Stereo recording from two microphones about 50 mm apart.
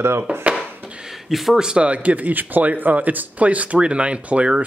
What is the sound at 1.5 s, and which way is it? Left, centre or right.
Speech, centre.